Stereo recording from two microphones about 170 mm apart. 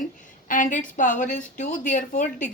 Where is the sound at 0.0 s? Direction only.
50° left (ahead or behind).